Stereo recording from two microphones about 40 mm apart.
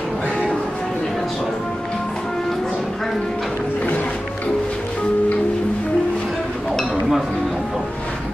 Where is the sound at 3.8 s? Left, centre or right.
Left.